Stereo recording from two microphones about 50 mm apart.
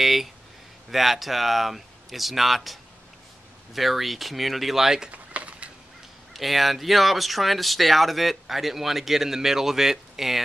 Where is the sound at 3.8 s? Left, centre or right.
Centre.